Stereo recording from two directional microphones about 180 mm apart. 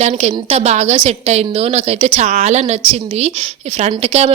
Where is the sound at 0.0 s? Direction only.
40° right (ahead or behind).